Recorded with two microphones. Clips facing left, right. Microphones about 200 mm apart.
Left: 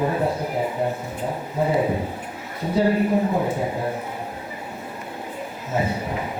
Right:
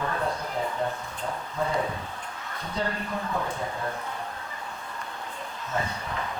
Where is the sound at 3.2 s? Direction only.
25° left (ahead or behind).